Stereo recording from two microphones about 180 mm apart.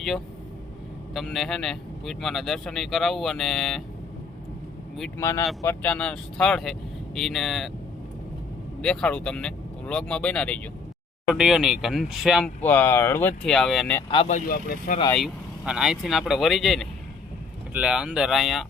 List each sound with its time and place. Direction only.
1.1 s a man's voice: centre (ahead or behind)
5.1 s a man's voice: 15° left (ahead or behind)
8.8 s a man's voice: 5° left (ahead or behind)
12.6 s speech: 10° left (ahead or behind)
14.3 s speech: 50° left (ahead or behind)
15.1 s a man's voice: centre (ahead or behind)